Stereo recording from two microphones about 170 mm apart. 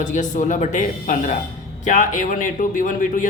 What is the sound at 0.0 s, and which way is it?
A man's voice, 45° left (ahead or behind).